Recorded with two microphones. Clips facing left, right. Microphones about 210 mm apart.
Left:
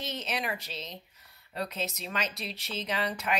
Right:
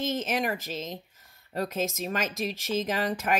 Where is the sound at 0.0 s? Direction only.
45° right (ahead or behind).